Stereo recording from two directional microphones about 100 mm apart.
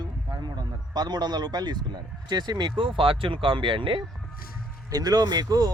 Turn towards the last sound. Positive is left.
turn(degrees=-40)  # may be behind; listen again after turning